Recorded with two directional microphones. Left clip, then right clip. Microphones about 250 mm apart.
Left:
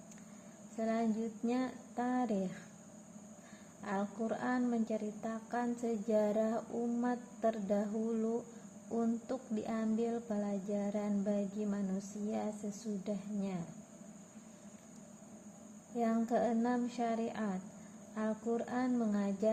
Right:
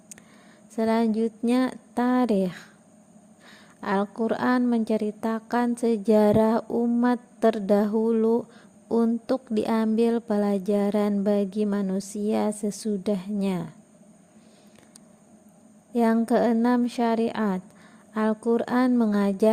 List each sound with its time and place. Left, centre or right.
0.8 s a woman's voice: right
3.8 s a woman's voice: right
16.0 s speech: right